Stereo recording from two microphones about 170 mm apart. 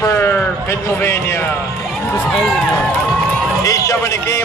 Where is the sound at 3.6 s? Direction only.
20° left (ahead or behind).